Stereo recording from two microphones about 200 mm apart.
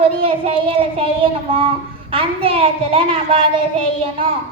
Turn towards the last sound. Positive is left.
turn(degrees=-25)  # may be behind; listen again after turning